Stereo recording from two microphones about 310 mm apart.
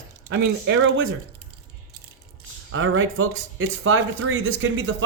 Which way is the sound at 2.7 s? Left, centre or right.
Right.